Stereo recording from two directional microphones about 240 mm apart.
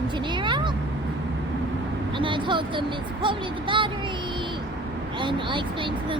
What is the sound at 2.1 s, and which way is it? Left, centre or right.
Speech, centre.